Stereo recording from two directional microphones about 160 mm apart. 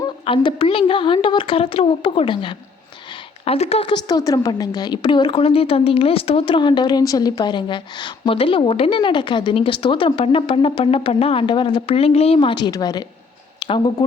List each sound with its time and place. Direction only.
0.0 s a woman's voice: 30° left (ahead or behind)